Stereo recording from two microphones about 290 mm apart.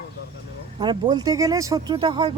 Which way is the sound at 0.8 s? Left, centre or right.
Centre.